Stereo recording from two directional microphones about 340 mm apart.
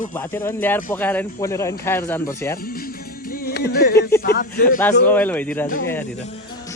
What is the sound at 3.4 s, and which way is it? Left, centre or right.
Music, left.